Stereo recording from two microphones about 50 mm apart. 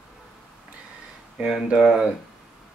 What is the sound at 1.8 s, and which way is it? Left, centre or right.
Speech, centre.